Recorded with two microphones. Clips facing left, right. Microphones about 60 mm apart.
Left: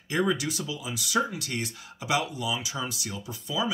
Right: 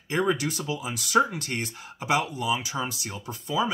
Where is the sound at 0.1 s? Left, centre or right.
Right.